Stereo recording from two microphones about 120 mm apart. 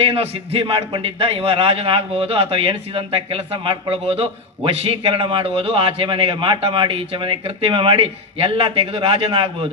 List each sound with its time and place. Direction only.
0.6 s a man's voice: 45° right (ahead or behind)